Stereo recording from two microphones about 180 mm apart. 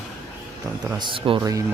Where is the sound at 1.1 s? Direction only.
30° right (ahead or behind).